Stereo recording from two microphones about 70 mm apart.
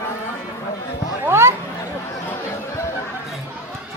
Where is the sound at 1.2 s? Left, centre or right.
Right.